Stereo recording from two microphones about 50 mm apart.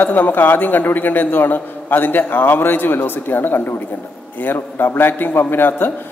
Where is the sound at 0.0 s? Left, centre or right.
Left.